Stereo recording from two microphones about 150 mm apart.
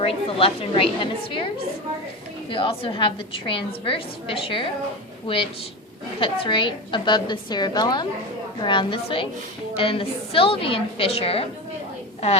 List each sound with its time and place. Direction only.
0.0 s a woman's voice: 40° left (ahead or behind)
6.1 s a woman's voice: 35° left (ahead or behind)